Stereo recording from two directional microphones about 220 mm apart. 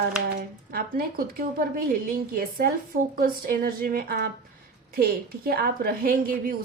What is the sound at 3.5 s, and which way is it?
A woman's voice, 40° right (ahead or behind).